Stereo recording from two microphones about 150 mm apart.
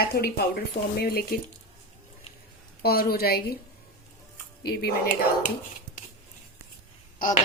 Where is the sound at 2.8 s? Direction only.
90° left.